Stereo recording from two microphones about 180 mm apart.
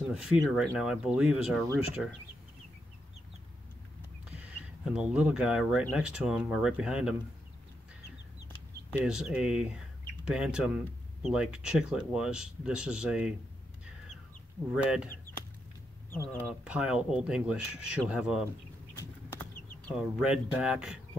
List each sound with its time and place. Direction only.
0.1 s speech: 5° right (ahead or behind)
4.8 s speech: 5° right (ahead or behind)
8.9 s speech: 5° right (ahead or behind)
14.7 s speech: 5° right (ahead or behind)
15.3 s chicken: 55° left (ahead or behind)
16.6 s speech: 5° right (ahead or behind)
18.9 s a sound: 10° left (ahead or behind)
20.0 s speech: 5° right (ahead or behind)